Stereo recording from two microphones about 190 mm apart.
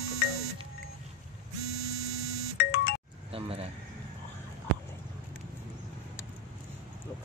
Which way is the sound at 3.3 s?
30° right (ahead or behind).